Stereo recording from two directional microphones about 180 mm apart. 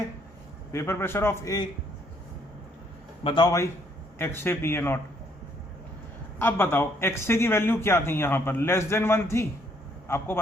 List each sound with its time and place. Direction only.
0.7 s speech: 15° left (ahead or behind)
3.2 s a man's voice: 25° left (ahead or behind)
6.4 s speech: 10° left (ahead or behind)